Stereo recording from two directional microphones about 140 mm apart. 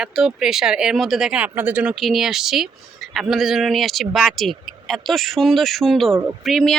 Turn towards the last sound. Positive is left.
turn(degrees=0)  # may be behind; listen again after turning